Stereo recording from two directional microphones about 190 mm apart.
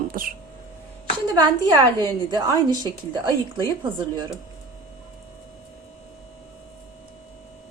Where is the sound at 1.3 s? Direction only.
20° right (ahead or behind).